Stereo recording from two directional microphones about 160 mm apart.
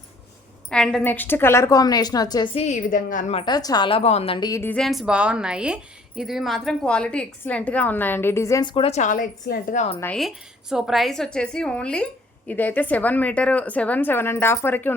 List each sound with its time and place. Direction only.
0.7 s a woman's voice: 5° left (ahead or behind); by 3.3 s 55° left (ahead or behind)
3.3 s a woman's voice: 25° left (ahead or behind)
4.4 s a woman's voice: 20° left (ahead or behind)
4.7 s a woman's voice: centre (ahead or behind); by 8.7 s 20° left (ahead or behind)
8.7 s speech: 40° left (ahead or behind); by 9.8 s 60° left (ahead or behind)
10.2 s a woman's voice: centre (ahead or behind)